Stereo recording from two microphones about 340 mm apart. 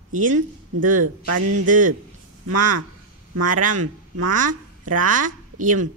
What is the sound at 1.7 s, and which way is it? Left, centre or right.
Speech, right.